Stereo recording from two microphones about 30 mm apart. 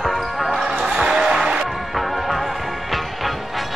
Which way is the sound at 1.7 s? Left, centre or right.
Centre.